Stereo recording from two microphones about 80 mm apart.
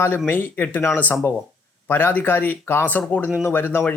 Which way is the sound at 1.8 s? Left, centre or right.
Left.